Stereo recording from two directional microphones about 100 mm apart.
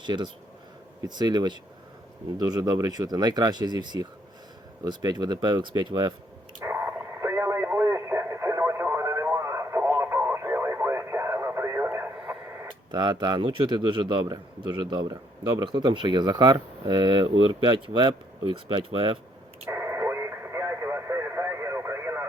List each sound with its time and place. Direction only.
0.0 s a man's voice: 50° right (ahead or behind)
6.6 s radio: 25° right (ahead or behind)
12.1 s radio: 10° right (ahead or behind)
12.9 s a man's voice: 45° right (ahead or behind)
19.6 s radio: 25° right (ahead or behind)